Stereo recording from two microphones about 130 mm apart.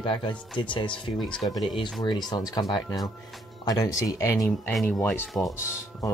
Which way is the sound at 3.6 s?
30° left (ahead or behind).